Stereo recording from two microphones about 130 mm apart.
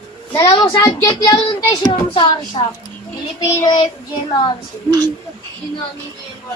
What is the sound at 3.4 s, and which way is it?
Speech, 30° left (ahead or behind).